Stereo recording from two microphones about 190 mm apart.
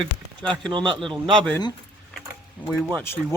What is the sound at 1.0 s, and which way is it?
Speech, 5° left (ahead or behind).